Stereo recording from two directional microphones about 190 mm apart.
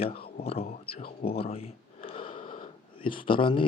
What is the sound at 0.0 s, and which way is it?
Speech, 30° left (ahead or behind).